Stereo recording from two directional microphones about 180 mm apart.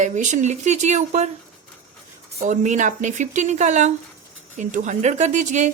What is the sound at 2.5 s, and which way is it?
Speech, 40° right (ahead or behind).